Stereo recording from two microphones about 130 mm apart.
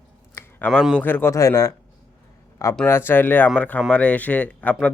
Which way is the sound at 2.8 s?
15° left (ahead or behind).